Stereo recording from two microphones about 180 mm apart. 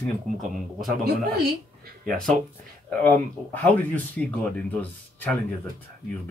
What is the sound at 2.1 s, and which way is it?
Speech, 5° left (ahead or behind).